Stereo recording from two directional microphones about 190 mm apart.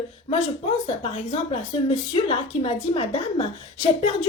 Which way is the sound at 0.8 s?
30° left (ahead or behind).